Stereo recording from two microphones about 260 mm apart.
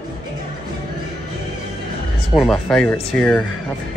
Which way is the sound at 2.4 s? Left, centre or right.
Centre.